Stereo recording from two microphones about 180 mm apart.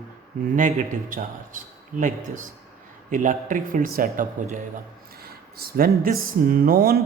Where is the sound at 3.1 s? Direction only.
45° right (ahead or behind).